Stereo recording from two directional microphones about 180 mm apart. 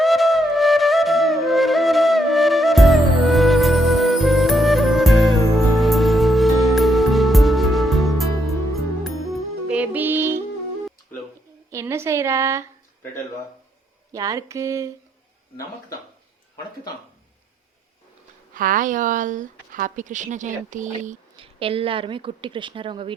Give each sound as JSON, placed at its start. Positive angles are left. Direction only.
{"t": 0.0, "sound": "flute", "side_deg": 0}
{"t": 9.0, "sound": "music", "side_deg": -5}
{"t": 11.7, "sound": "a sound", "side_deg": -15}
{"t": 14.1, "sound": "a sound", "side_deg": -20}
{"t": 18.5, "sound": "speech", "side_deg": -50}
{"t": 21.3, "sound": "a woman's voice", "side_deg": -30}